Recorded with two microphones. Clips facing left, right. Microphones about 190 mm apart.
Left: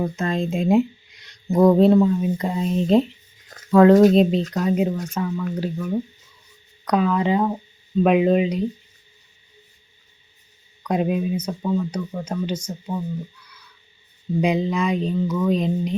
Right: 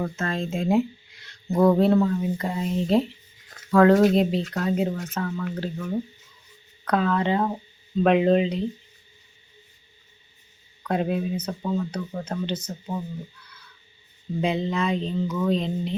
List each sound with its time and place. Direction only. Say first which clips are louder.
0.0 s speech: left 4 dB; 15° left (ahead or behind)
10.8 s speech: left 3 dB; 15° left (ahead or behind)
14.4 s speech: left 3 dB; 10° left (ahead or behind)